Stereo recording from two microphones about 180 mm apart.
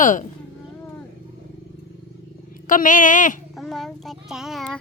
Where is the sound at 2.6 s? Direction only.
50° left (ahead or behind).